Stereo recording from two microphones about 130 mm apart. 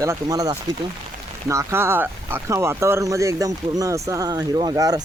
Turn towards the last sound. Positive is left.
turn(degrees=-30)  # may be behind; listen again after turning